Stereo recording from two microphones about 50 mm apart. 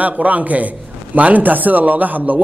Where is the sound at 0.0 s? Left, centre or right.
Right.